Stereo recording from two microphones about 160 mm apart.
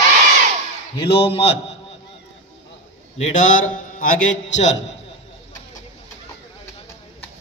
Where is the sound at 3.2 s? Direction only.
55° left (ahead or behind).